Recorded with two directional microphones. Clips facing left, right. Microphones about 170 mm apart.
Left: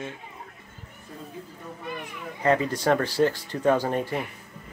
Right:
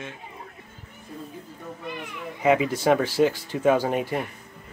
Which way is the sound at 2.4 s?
10° right (ahead or behind).